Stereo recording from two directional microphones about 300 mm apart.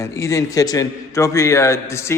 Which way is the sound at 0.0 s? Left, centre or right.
Centre.